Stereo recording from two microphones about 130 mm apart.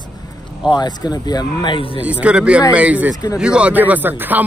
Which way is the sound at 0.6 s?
35° left (ahead or behind).